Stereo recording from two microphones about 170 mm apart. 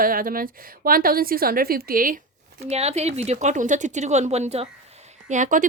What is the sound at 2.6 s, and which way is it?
Speech, 40° right (ahead or behind).